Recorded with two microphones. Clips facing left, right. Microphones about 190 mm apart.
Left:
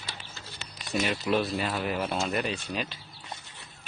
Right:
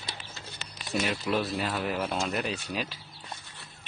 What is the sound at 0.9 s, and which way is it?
Speech, centre (ahead or behind).